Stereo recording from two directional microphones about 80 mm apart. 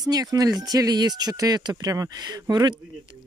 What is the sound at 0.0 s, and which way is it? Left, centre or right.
Speech, right.